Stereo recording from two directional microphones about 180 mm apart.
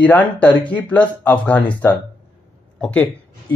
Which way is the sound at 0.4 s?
10° left (ahead or behind).